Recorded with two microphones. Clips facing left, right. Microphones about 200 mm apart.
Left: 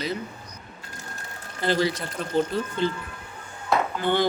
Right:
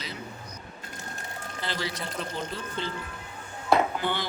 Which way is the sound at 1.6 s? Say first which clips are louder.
Left 11 dB; 50° left (ahead or behind).